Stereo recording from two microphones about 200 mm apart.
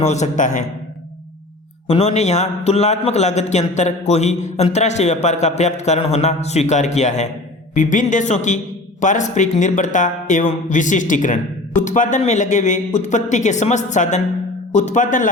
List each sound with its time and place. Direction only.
0.0 s a man's voice: 35° left (ahead or behind)
1.9 s a man's voice: 35° left (ahead or behind)